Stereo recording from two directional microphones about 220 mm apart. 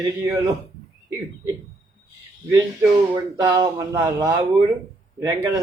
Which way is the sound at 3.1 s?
15° right (ahead or behind).